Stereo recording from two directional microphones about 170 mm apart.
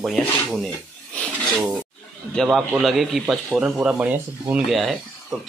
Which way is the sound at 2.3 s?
Centre (ahead or behind).